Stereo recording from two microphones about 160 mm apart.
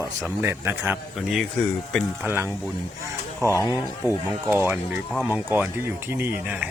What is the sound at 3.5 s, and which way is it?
Speech, 15° left (ahead or behind).